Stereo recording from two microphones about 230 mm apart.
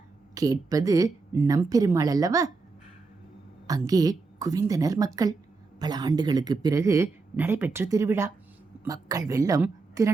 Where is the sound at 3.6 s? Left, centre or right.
Centre.